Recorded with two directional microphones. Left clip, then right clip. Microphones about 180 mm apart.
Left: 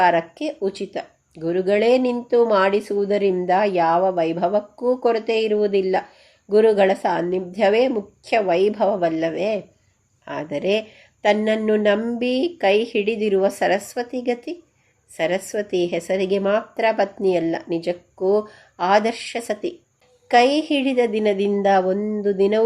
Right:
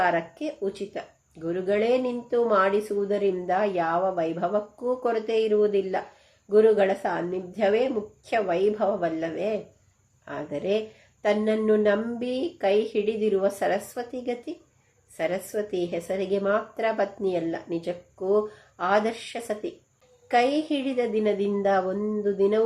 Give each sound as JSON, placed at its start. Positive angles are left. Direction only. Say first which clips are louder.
{"t": 0.0, "sound": "speech", "louder": "left 7 dB", "side_deg": 30}